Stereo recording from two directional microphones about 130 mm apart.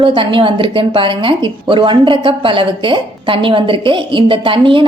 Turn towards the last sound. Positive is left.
turn(degrees=-40)  # may be behind; listen again after turning